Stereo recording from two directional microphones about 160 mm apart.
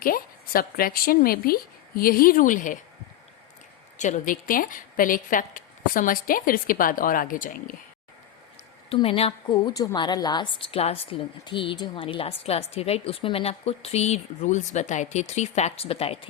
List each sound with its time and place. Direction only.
0.0 s a woman's voice: 65° left (ahead or behind)
3.9 s a woman's voice: 50° left (ahead or behind)
8.9 s a woman's voice: 35° left (ahead or behind)